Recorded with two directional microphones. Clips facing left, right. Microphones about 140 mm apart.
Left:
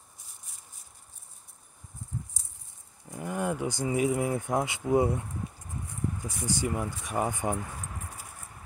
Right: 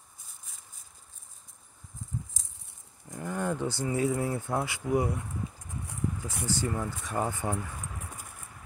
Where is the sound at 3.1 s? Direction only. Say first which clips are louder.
Left 1 dB; 10° left (ahead or behind).